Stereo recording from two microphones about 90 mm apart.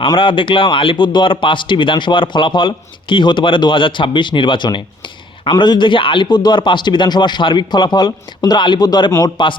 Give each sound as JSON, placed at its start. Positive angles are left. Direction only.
{"t": 0.2, "sound": "speech", "side_deg": 70}
{"t": 9.2, "sound": "speech", "side_deg": 65}